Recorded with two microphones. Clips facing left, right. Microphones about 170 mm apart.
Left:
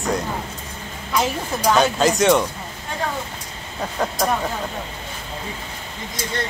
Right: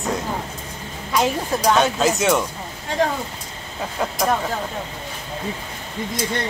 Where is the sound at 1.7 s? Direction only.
Centre (ahead or behind).